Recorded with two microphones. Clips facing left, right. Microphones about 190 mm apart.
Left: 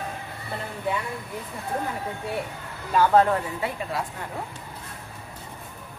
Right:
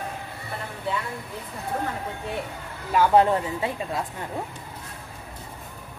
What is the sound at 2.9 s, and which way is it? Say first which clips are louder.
Speech: right 1 dB; 10° right (ahead or behind).